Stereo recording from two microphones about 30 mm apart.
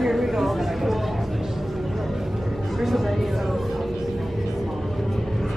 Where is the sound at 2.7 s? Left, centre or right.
Centre.